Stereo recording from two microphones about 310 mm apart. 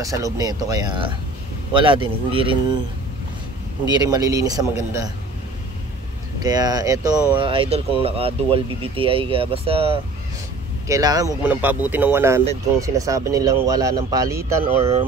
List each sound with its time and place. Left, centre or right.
0.0 s speech: centre
3.9 s speech: centre
6.4 s speech: centre